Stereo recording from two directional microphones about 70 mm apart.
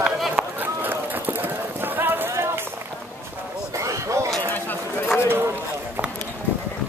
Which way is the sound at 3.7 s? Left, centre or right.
Right.